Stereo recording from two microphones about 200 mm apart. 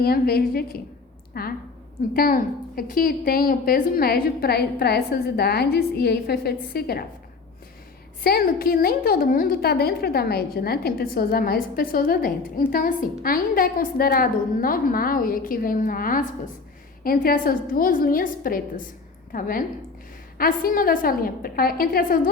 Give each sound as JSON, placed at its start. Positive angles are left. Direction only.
{"t": 0.0, "sound": "a woman's voice", "side_deg": 50}
{"t": 8.2, "sound": "a woman's voice", "side_deg": 50}